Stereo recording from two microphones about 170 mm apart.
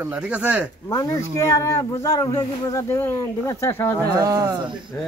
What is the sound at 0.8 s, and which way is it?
Speech, 20° left (ahead or behind).